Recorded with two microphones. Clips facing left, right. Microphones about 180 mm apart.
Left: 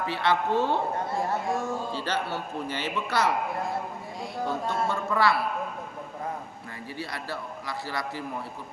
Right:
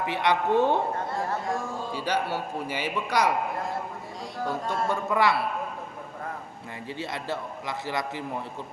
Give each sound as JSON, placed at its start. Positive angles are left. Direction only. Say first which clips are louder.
{"t": 0.0, "sound": "a man's voice", "louder": "right 1 dB", "side_deg": -20}
{"t": 1.9, "sound": "a man's voice", "louder": "right 2 dB", "side_deg": -10}
{"t": 4.6, "sound": "a man's voice", "louder": "even", "side_deg": -15}
{"t": 7.0, "sound": "a man's voice", "louder": "right 3 dB", "side_deg": -20}